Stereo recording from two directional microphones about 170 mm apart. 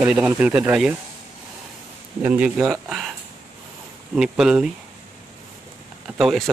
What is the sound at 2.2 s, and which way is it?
Speech, 10° right (ahead or behind).